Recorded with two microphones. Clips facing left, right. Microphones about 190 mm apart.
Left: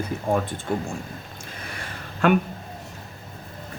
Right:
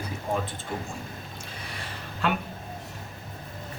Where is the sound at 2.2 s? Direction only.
50° left (ahead or behind).